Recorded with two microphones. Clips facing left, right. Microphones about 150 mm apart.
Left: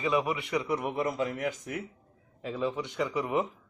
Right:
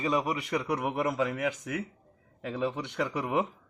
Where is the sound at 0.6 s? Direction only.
80° right.